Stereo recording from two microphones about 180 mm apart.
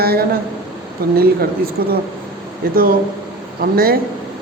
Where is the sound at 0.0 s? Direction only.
60° right (ahead or behind).